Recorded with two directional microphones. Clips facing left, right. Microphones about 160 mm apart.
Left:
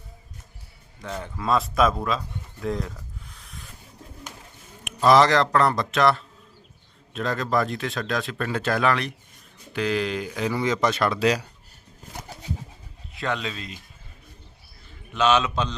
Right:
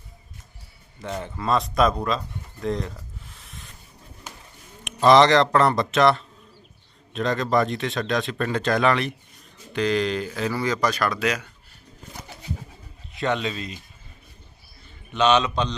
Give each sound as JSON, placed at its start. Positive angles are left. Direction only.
{"t": 0.9, "sound": "speech", "side_deg": 0}
{"t": 4.8, "sound": "speech", "side_deg": 5}
{"t": 13.1, "sound": "speech", "side_deg": 0}
{"t": 15.1, "sound": "speech", "side_deg": 5}